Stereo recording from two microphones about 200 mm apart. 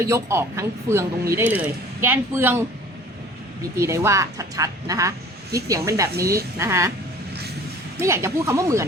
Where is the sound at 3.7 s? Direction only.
15° right (ahead or behind).